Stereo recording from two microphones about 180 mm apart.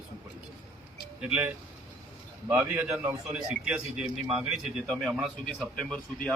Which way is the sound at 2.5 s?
10° right (ahead or behind).